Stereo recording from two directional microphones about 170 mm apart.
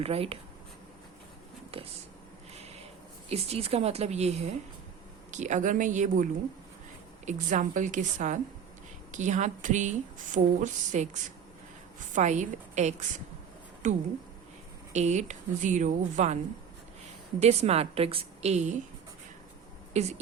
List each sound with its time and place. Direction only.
0.0 s a woman's voice: 35° right (ahead or behind)
1.7 s speech: 35° right (ahead or behind)
3.2 s a woman's voice: 35° right (ahead or behind)
7.3 s speech: 45° right (ahead or behind)
14.9 s speech: 45° right (ahead or behind)
17.4 s a woman's voice: 40° right (ahead or behind)
19.9 s a woman's voice: 40° right (ahead or behind)